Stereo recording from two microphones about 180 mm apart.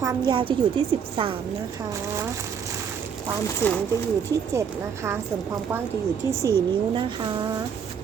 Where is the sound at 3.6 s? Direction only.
10° left (ahead or behind).